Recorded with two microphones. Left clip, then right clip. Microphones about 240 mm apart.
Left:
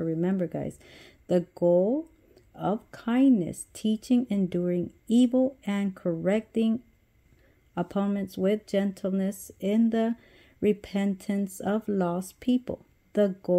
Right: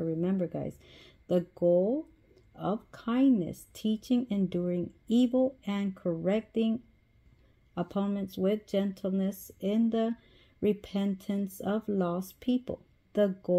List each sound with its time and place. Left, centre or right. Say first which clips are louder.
0.0 s speech: left 3 dB; left